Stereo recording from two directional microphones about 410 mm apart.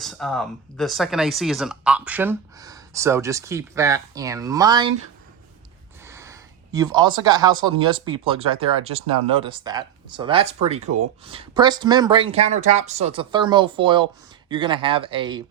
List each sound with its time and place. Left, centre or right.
0.0 s speech: centre
6.1 s a sound: centre
7.6 s speech: centre
10.8 s speech: right
11.3 s speech: centre